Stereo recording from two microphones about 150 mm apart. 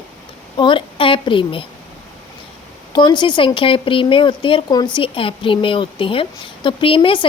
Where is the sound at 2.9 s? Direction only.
30° left (ahead or behind).